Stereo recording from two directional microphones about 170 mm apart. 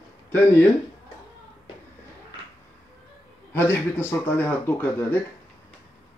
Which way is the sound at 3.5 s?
15° left (ahead or behind).